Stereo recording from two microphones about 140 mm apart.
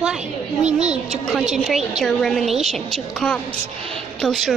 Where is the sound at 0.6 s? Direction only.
50° right (ahead or behind).